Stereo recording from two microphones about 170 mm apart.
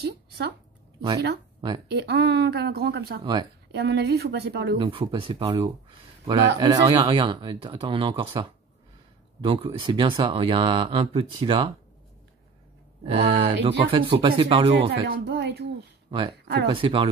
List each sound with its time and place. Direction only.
1.9 s speech: 75° right (ahead or behind)
3.7 s speech: 80° right
4.7 s speech: 30° right (ahead or behind)
13.0 s speech: 35° right (ahead or behind)
14.7 s speech: 80° right
16.1 s speech: 30° right (ahead or behind)